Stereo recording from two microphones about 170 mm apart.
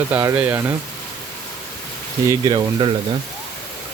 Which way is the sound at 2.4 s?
25° right (ahead or behind).